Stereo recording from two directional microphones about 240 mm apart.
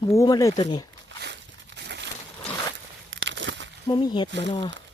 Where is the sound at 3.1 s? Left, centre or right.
Right.